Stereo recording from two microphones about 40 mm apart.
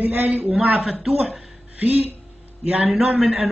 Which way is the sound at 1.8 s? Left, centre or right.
Right.